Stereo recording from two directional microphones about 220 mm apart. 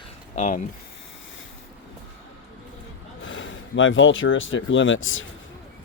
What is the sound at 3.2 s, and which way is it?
Speech, 60° left (ahead or behind).